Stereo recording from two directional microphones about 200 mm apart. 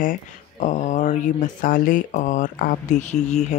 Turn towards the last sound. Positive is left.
turn(degrees=35)  # may be behind; listen again after turning